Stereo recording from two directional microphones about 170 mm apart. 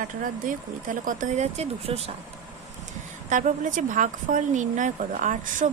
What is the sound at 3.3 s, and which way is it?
Speech, 50° right (ahead or behind).